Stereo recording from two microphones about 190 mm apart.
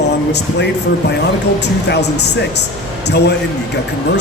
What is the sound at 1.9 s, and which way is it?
Speech, 65° left (ahead or behind).